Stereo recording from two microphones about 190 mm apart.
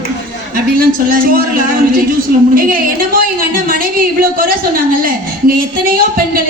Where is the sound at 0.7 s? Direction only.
50° right (ahead or behind).